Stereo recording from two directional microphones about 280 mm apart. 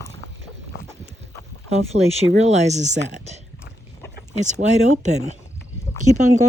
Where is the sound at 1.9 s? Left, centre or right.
Right.